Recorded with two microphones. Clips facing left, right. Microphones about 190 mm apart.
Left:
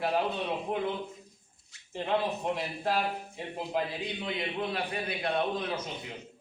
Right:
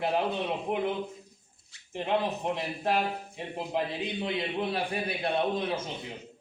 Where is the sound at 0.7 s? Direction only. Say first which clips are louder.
Right 2 dB; 20° right (ahead or behind).